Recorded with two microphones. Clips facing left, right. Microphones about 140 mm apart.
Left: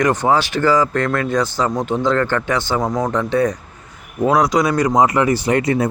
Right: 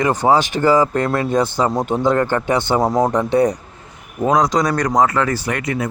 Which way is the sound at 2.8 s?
35° right (ahead or behind).